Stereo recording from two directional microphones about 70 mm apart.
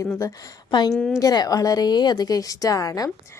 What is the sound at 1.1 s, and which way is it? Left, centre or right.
A woman's voice, left.